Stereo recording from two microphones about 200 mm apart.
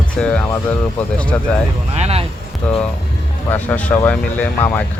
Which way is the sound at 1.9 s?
30° right (ahead or behind).